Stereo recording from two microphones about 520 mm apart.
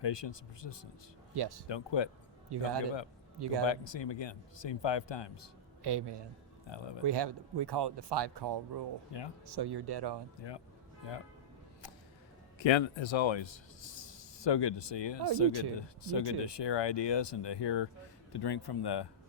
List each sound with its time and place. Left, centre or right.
0.0 s speech: left
1.3 s speech: right
1.6 s speech: left
2.5 s speech: right
3.7 s speech: left
5.8 s speech: right
6.7 s speech: left
7.0 s speech: right
9.1 s speech: left
9.5 s speech: right
12.5 s speech: left